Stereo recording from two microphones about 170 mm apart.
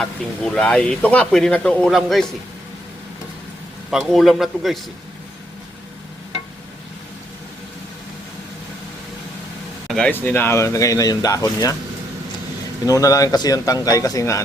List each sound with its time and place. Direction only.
0.0 s speech: 5° left (ahead or behind)
3.9 s speech: centre (ahead or behind)
9.9 s speech: 10° left (ahead or behind)
12.8 s speech: 20° left (ahead or behind)